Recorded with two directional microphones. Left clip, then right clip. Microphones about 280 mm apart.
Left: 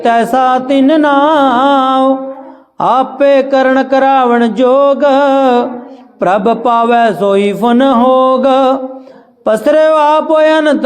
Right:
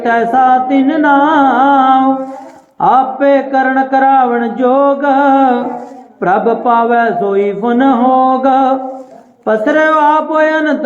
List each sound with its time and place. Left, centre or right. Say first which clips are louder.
0.0 s music: left 1 dB; left
2.7 s speech: right 1 dB; left